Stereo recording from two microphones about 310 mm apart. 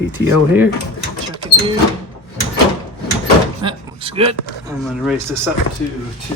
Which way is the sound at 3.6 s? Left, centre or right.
Centre.